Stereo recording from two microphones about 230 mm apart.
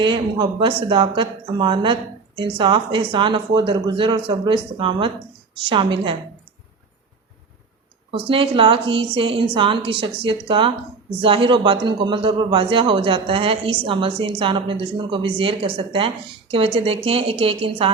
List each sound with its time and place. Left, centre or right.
0.0 s a man's voice: right
8.1 s a man's voice: right